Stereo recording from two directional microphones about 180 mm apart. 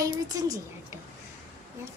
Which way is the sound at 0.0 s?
20° right (ahead or behind).